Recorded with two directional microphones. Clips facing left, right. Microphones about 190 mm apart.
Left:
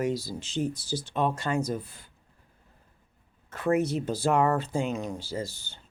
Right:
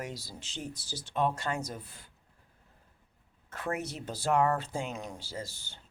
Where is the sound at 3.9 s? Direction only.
90° left.